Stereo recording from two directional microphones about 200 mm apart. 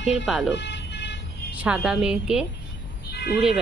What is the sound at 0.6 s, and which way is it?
Vehicle, 60° left (ahead or behind).